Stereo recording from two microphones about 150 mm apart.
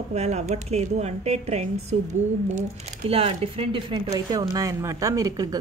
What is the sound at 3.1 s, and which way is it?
Speech, 40° right (ahead or behind).